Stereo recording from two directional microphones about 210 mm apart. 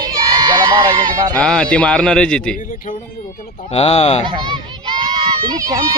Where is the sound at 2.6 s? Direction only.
40° left (ahead or behind).